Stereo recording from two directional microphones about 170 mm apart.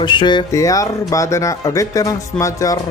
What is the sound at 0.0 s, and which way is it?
Speech, 25° left (ahead or behind).